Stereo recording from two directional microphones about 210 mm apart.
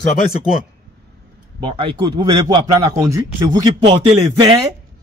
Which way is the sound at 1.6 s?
25° right (ahead or behind).